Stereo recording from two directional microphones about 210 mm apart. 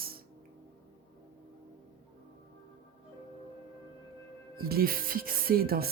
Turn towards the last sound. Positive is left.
turn(degrees=-45)  # may be behind; listen again after turning